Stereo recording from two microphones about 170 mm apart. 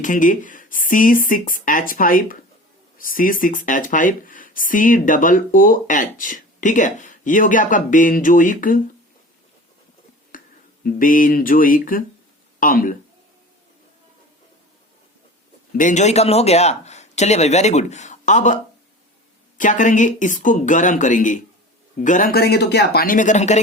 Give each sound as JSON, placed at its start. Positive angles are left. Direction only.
{"t": 0.0, "sound": "speech", "side_deg": 50}
{"t": 10.3, "sound": "a sound", "side_deg": 55}
{"t": 10.8, "sound": "speech", "side_deg": 50}
{"t": 15.8, "sound": "a man's voice", "side_deg": 45}